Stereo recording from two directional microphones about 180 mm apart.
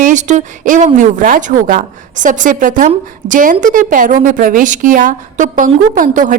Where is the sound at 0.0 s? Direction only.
45° right (ahead or behind).